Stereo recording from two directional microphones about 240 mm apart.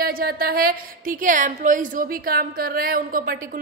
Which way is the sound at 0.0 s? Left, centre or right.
Right.